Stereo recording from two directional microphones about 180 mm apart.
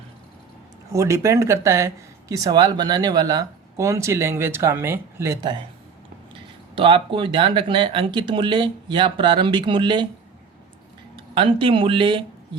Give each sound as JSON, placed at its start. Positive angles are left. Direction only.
{"t": 0.9, "sound": "speech", "side_deg": -15}
{"t": 6.7, "sound": "speech", "side_deg": -30}
{"t": 11.3, "sound": "speech", "side_deg": -30}